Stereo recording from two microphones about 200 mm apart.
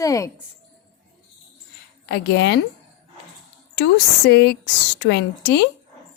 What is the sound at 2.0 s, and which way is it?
Speech, 55° left (ahead or behind).